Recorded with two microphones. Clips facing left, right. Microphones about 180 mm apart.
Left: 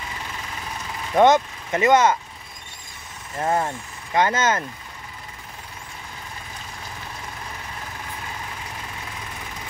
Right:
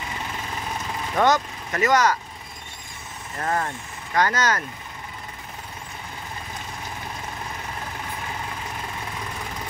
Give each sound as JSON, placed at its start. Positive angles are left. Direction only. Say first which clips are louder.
{"t": 1.1, "sound": "speech", "louder": "left 5 dB", "side_deg": 20}
{"t": 3.3, "sound": "speech", "louder": "left 3 dB", "side_deg": 20}